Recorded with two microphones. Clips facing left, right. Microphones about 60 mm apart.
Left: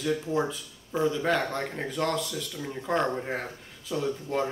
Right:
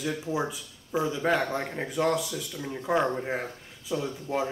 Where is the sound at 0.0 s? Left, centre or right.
Centre.